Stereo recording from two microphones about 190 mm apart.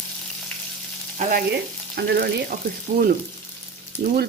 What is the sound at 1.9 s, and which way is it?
Speech, 60° right (ahead or behind).